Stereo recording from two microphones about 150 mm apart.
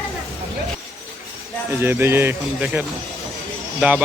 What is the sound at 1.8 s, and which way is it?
Speech, 15° right (ahead or behind).